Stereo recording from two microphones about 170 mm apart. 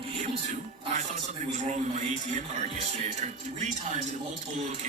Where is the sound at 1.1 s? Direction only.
45° right (ahead or behind).